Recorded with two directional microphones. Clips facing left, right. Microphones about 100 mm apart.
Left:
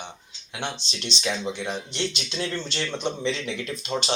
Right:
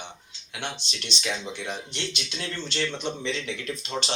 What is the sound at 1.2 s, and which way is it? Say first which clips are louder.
Speech: left 4 dB; 20° left (ahead or behind).